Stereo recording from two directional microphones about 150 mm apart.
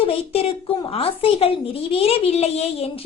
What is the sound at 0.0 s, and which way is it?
A woman's voice, 40° left (ahead or behind).